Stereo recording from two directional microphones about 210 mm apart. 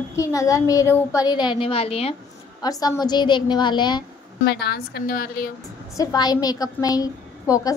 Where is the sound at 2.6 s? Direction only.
15° left (ahead or behind).